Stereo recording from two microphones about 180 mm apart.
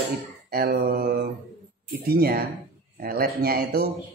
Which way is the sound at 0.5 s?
55° right (ahead or behind).